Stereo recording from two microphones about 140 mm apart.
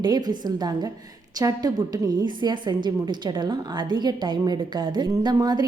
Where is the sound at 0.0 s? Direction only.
30° right (ahead or behind).